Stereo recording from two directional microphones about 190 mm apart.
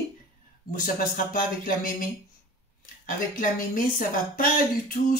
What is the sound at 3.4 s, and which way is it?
Speech, 45° left (ahead or behind).